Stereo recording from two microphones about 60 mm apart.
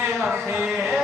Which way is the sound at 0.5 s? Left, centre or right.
Centre.